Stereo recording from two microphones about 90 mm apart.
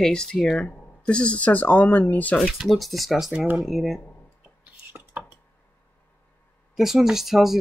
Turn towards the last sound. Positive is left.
turn(degrees=-5)  # may be behind; listen again after turning